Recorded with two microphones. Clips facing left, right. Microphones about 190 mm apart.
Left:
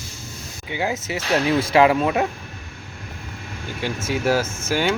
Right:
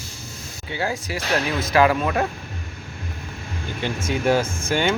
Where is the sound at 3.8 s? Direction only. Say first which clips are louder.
Even; 5° left (ahead or behind).